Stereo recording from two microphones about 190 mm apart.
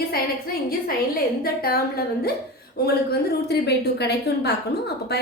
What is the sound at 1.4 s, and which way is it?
A woman's voice, 55° left (ahead or behind).